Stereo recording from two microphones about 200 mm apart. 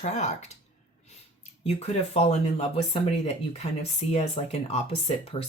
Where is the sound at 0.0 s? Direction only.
35° left (ahead or behind).